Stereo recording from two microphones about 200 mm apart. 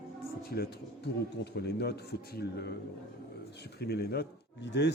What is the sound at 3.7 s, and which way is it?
A man's voice, 50° left (ahead or behind).